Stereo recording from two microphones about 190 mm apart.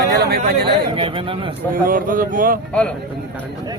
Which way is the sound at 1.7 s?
45° right (ahead or behind).